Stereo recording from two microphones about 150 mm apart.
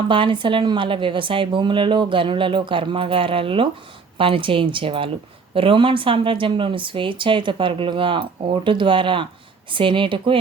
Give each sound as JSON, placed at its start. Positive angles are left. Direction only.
{"t": 0.1, "sound": "a woman's voice", "side_deg": -35}